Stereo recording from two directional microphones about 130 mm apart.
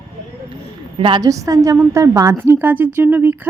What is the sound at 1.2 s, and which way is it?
A woman's voice, 25° right (ahead or behind).